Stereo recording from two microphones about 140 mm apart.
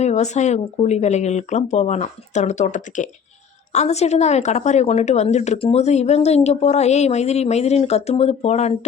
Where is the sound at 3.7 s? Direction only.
50° left (ahead or behind).